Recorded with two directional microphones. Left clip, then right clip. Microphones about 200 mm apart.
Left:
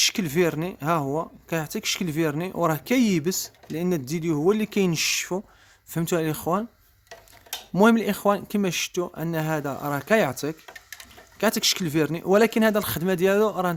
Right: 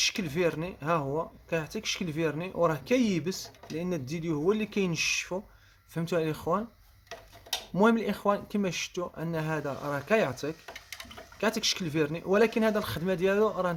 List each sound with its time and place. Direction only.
0.0 s speech: 50° left (ahead or behind)
7.7 s speech: 45° left (ahead or behind)